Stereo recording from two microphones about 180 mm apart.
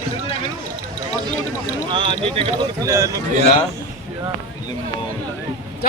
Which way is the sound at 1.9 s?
30° right (ahead or behind).